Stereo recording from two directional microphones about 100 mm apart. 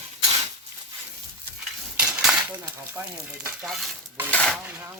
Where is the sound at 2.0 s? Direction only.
10° right (ahead or behind).